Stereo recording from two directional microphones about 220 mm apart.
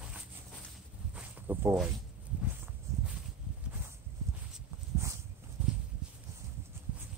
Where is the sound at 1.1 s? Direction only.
10° right (ahead or behind).